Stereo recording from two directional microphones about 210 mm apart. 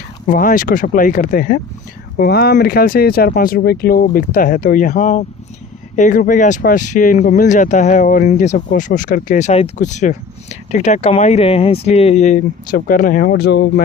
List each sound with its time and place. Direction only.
0.3 s speech: 40° left (ahead or behind)